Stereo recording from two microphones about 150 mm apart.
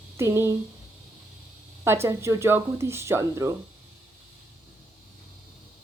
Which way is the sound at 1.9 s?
15° right (ahead or behind).